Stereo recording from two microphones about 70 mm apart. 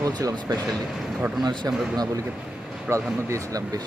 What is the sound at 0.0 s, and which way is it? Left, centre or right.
Speech, right.